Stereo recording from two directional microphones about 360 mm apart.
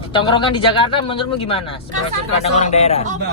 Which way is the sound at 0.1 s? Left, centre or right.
Centre.